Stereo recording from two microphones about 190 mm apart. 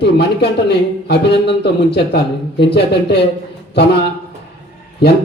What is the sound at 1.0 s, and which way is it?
Speech, 60° left (ahead or behind).